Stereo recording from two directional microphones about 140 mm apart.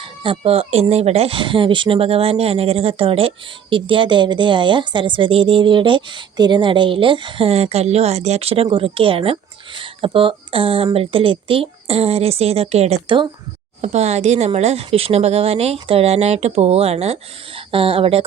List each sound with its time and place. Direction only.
0.0 s a woman's voice: 35° right (ahead or behind)